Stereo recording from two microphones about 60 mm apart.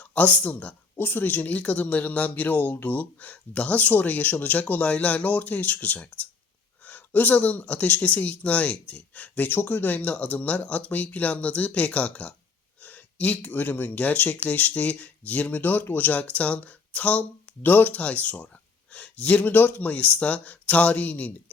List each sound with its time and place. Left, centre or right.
0.0 s speech: left